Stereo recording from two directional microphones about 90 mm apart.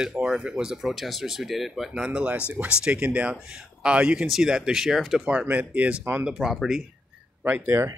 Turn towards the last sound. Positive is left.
turn(degrees=-35)  # may be behind; listen again after turning